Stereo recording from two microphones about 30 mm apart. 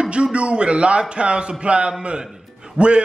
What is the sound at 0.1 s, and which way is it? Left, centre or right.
A man's voice, right.